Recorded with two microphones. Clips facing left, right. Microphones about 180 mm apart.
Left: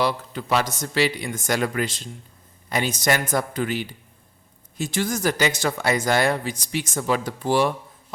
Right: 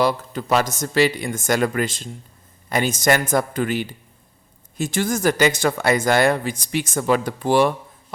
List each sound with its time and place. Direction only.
0.0 s speech: 45° right (ahead or behind)